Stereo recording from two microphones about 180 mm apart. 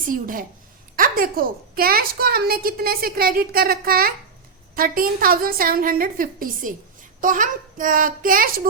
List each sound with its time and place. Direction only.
0.1 s a woman's voice: 50° right (ahead or behind)